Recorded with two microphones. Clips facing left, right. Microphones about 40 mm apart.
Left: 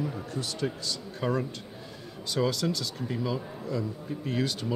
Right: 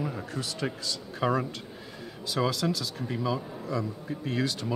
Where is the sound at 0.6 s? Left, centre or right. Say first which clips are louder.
Left 1 dB; right.